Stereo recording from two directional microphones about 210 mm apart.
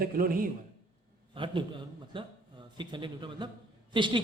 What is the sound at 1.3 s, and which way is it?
A man's voice, 25° right (ahead or behind).